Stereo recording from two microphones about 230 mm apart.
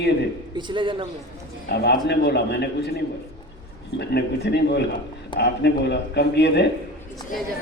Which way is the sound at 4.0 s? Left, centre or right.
Left.